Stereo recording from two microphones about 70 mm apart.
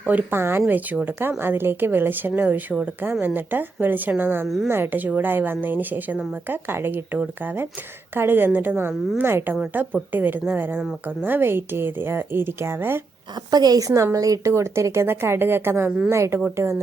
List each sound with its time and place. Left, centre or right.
0.1 s speech: right
0.3 s a woman's voice: right
4.4 s a woman's voice: centre
4.7 s a woman's voice: right
13.5 s a woman's voice: right